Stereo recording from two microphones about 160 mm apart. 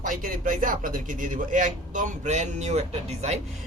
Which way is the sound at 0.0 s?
55° right (ahead or behind).